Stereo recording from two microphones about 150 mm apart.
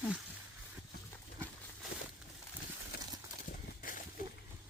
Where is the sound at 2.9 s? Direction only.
90° left.